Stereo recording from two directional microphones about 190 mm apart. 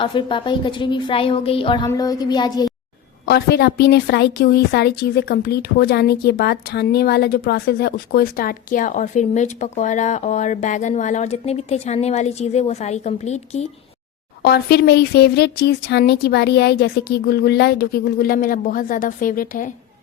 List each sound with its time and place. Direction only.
0.0 s a woman's voice: 25° left (ahead or behind)
3.2 s a woman's voice: 60° left (ahead or behind); by 13.7 s 35° left (ahead or behind)
14.4 s a woman's voice: 60° left (ahead or behind)